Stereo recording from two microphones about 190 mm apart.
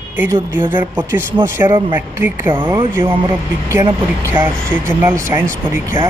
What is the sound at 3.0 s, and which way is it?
Speech, 25° right (ahead or behind).